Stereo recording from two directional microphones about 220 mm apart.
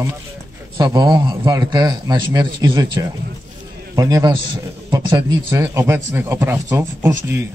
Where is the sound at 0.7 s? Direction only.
20° right (ahead or behind).